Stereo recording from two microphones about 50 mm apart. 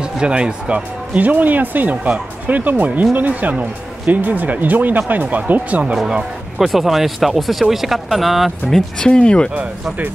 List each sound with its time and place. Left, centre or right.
0.0 s speech: centre
1.2 s speech: right
6.6 s speech: centre
9.1 s speech: centre